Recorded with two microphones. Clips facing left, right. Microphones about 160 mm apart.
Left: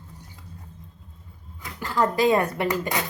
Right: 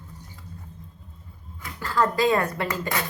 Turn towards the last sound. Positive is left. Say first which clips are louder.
# left 2 dB
turn(degrees=15)  # may be behind; listen again after turning